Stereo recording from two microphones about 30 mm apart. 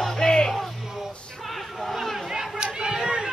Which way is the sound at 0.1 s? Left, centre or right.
Left.